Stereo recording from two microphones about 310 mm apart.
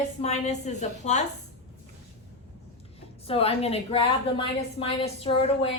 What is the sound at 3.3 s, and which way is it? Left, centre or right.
A woman's voice, centre.